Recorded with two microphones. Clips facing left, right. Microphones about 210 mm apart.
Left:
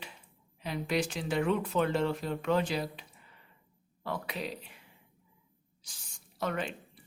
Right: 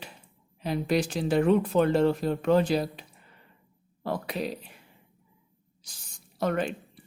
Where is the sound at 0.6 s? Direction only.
35° right (ahead or behind).